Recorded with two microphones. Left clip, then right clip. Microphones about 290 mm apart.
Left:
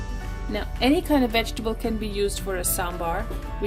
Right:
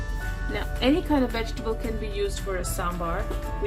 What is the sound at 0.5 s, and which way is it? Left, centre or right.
Speech, left.